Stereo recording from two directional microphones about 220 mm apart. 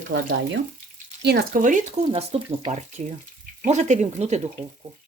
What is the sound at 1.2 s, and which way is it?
Speech, 45° right (ahead or behind).